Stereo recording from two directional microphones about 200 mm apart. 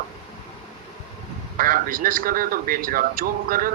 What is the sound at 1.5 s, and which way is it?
A man's voice, 45° right (ahead or behind).